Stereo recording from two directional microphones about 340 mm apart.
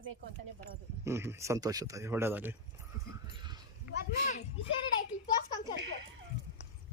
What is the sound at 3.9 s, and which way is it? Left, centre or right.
Speech, left.